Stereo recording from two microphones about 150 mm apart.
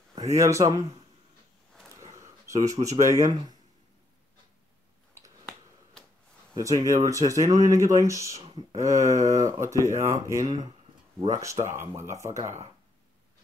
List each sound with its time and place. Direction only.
0.2 s speech: 20° right (ahead or behind)
2.0 s speech: 20° right (ahead or behind)
5.1 s a sound: 15° right (ahead or behind)
6.5 s speech: 25° right (ahead or behind)